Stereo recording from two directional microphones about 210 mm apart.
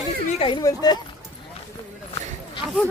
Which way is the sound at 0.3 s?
25° left (ahead or behind).